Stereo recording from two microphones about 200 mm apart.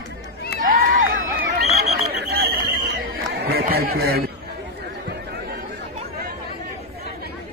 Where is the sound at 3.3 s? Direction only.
50° right (ahead or behind).